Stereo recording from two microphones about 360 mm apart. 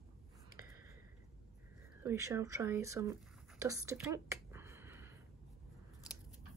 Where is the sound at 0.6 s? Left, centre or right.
Left.